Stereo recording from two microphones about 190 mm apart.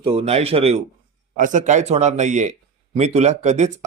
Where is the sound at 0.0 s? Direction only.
30° right (ahead or behind).